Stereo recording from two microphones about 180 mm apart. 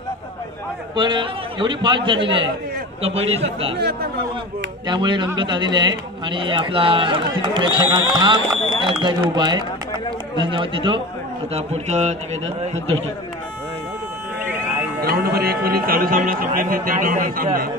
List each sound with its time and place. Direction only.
0.9 s a man's voice: 25° right (ahead or behind)
4.8 s speech: 25° right (ahead or behind)
11.5 s a man's voice: 40° right (ahead or behind)
15.0 s speech: 60° right (ahead or behind)